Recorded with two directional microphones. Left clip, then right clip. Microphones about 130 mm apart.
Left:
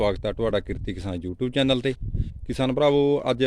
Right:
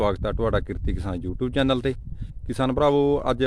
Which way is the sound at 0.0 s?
5° left (ahead or behind).